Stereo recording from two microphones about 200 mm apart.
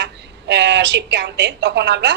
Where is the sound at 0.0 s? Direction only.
60° right (ahead or behind).